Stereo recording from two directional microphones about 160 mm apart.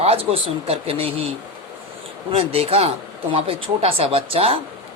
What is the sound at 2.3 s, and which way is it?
Speech, 40° right (ahead or behind).